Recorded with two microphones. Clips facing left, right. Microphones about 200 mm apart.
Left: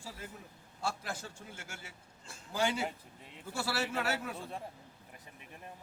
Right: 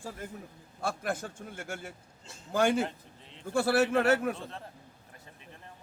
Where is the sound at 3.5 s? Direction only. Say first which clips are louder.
Right 10 dB; 55° right (ahead or behind).